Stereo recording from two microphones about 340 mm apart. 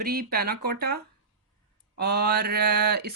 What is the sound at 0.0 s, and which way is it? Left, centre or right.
Speech, right.